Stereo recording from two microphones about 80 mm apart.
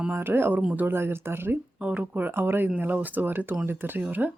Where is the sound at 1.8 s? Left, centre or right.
Centre.